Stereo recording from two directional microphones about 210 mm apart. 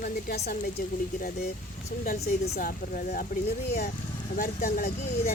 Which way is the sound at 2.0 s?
45° left (ahead or behind).